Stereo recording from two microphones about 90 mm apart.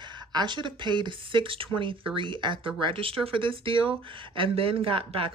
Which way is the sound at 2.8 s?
80° right.